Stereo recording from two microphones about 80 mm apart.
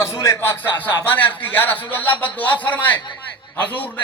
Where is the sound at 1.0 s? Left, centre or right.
Left.